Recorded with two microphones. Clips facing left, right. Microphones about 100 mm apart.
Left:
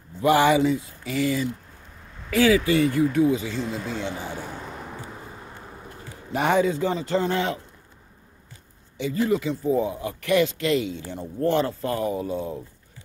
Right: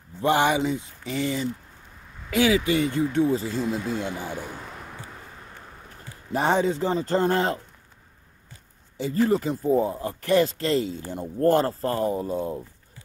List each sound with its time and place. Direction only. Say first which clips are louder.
0.2 s speech: left 3 dB; 20° right (ahead or behind)
3.5 s speech: right 2 dB; centre (ahead or behind)
6.3 s speech: left 1 dB; 30° right (ahead or behind)
9.0 s speech: right 1 dB; 40° right (ahead or behind)